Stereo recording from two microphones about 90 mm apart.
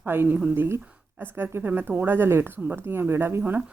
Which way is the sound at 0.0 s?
25° right (ahead or behind).